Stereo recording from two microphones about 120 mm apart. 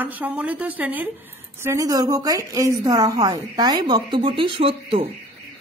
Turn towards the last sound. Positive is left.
turn(degrees=-50)  # may be behind; listen again after turning